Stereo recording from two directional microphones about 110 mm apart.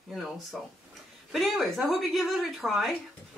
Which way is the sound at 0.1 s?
Centre (ahead or behind).